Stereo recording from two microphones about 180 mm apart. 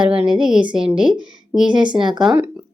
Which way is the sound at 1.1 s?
25° right (ahead or behind).